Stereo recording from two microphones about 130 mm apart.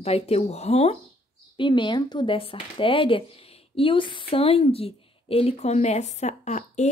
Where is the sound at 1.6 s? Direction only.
35° left (ahead or behind).